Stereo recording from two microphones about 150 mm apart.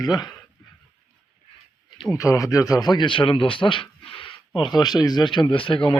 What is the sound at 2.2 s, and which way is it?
Speech, 20° left (ahead or behind).